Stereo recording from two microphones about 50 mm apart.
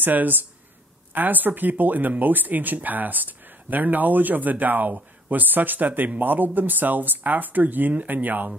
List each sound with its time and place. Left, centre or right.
0.0 s speech: right